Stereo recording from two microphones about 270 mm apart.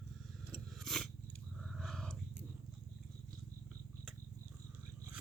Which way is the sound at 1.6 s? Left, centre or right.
Centre.